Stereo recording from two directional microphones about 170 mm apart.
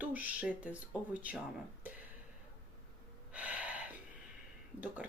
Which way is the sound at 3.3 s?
10° right (ahead or behind).